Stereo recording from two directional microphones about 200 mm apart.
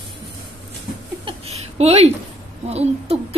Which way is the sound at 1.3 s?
30° right (ahead or behind).